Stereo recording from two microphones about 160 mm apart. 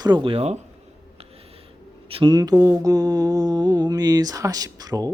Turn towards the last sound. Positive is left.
turn(degrees=-25)  # may be behind; listen again after turning